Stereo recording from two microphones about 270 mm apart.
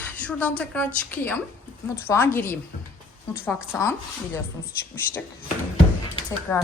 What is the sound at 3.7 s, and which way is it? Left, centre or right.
Speech, centre.